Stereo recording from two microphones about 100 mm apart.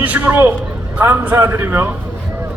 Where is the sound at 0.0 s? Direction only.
15° right (ahead or behind).